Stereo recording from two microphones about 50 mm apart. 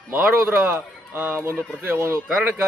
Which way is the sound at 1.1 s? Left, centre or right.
Right.